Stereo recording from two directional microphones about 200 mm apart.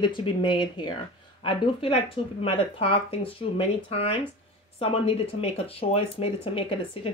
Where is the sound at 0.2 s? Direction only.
25° left (ahead or behind).